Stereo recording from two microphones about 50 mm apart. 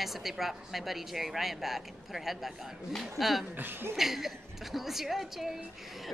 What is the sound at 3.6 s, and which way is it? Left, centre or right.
Speech, right.